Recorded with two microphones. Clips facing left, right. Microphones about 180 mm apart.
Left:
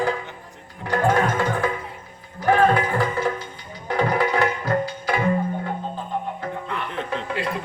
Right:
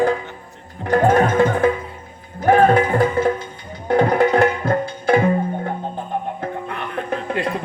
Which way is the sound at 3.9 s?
50° right (ahead or behind).